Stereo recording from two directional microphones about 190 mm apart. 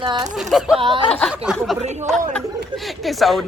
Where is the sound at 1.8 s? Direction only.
35° right (ahead or behind).